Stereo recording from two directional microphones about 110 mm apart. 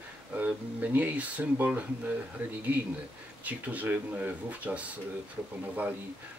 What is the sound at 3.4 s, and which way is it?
Speech, 15° right (ahead or behind).